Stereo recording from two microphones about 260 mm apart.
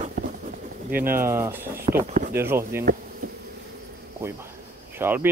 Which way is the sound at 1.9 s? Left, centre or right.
Right.